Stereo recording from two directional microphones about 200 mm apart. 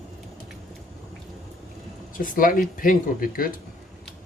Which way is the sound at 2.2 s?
45° left (ahead or behind).